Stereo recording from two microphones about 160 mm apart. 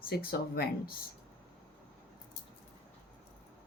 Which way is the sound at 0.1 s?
75° left (ahead or behind).